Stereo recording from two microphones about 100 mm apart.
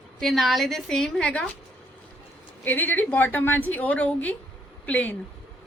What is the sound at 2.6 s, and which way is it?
A woman's voice, 20° left (ahead or behind).